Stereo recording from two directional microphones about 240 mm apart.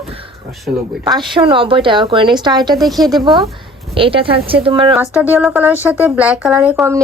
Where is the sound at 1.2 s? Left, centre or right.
Right.